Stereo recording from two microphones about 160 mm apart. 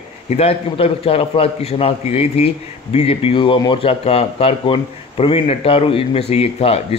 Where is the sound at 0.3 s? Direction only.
40° left (ahead or behind).